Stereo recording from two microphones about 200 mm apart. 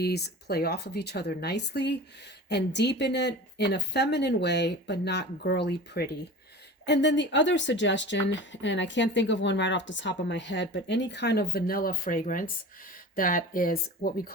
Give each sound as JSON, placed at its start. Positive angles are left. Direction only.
{"t": 0.0, "sound": "speech", "side_deg": 55}